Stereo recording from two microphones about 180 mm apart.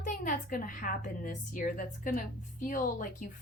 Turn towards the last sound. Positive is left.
turn(degrees=50)  # may be behind; listen again after turning